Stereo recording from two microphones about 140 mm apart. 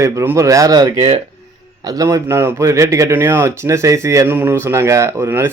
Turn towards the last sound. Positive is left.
turn(degrees=-20)  # may be behind; listen again after turning